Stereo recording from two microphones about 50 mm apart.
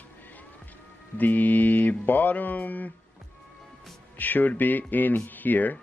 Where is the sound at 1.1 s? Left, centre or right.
Left.